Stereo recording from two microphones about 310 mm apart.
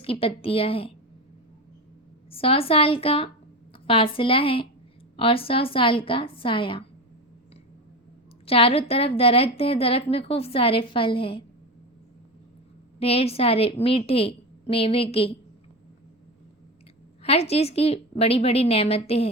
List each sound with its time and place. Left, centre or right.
0.0 s a woman's voice: centre
2.3 s a woman's voice: centre
8.4 s a woman's voice: centre
13.0 s a woman's voice: centre
17.2 s a woman's voice: centre